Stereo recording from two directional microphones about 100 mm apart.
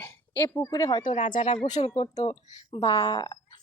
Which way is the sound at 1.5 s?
90° left.